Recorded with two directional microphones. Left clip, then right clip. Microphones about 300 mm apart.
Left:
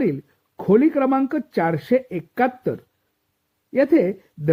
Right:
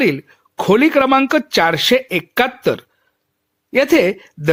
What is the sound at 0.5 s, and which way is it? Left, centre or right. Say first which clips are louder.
Speech: right 5 dB; centre.